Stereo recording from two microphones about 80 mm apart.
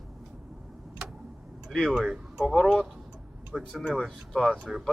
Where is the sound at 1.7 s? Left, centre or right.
Centre.